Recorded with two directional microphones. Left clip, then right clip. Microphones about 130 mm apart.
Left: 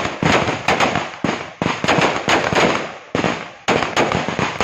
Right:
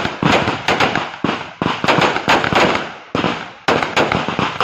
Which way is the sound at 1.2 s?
Centre (ahead or behind).